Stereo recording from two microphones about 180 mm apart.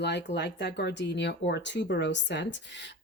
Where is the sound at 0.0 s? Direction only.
70° left (ahead or behind).